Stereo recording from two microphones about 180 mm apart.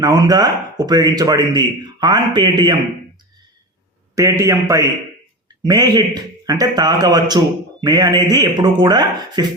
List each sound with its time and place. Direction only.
0.0 s a man's voice: 20° right (ahead or behind)
4.1 s a man's voice: 15° right (ahead or behind)